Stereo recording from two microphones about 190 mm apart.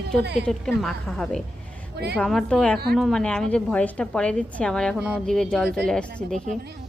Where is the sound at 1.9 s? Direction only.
60° right (ahead or behind).